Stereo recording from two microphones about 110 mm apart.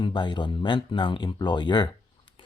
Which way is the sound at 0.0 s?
45° left (ahead or behind).